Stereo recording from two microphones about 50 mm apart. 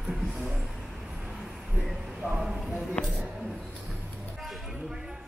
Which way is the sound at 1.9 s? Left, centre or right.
Centre.